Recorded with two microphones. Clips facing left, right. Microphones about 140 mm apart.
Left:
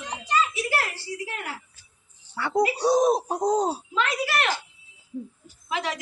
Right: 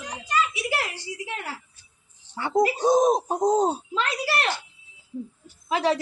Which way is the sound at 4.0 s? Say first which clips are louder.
Left 2 dB; 35° right (ahead or behind).